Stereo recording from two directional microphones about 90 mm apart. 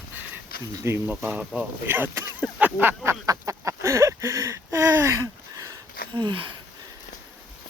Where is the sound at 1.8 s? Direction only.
25° right (ahead or behind).